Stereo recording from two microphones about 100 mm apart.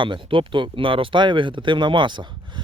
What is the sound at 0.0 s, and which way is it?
Speech, 55° right (ahead or behind).